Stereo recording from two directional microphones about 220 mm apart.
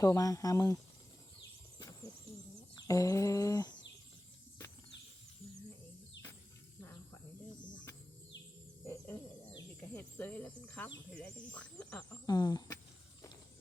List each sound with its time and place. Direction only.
0.0 s speech: 15° left (ahead or behind)
2.7 s humming: 15° left (ahead or behind)
8.8 s a sound: 10° left (ahead or behind)
12.2 s speech: 15° left (ahead or behind)